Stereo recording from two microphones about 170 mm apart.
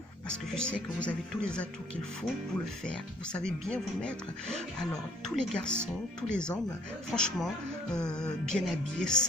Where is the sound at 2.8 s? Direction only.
5° left (ahead or behind).